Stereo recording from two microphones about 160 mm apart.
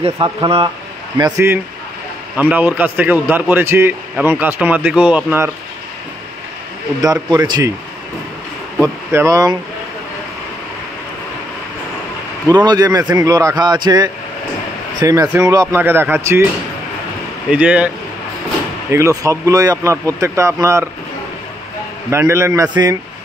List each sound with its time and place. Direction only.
0.0 s speech: 35° right (ahead or behind)
1.1 s a man's voice: 20° right (ahead or behind)
7.0 s speech: 25° right (ahead or behind)
8.8 s speech: 20° right (ahead or behind)
12.4 s a man's voice: 25° right (ahead or behind)
17.5 s a man's voice: 10° right (ahead or behind)
22.1 s a man's voice: 15° right (ahead or behind)